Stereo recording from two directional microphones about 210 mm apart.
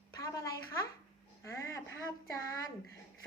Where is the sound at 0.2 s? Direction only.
15° left (ahead or behind).